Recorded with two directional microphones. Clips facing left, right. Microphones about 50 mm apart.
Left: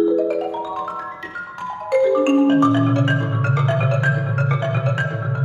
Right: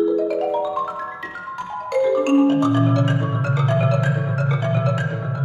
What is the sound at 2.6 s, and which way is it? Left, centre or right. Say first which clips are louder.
Music: left 2 dB; left.